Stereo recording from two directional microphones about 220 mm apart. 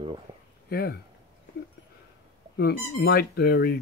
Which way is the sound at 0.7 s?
45° left (ahead or behind).